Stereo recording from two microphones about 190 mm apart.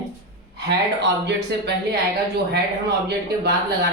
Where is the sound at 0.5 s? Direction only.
65° right (ahead or behind).